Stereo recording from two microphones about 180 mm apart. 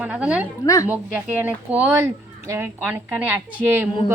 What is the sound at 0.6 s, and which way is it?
Speech, 20° left (ahead or behind).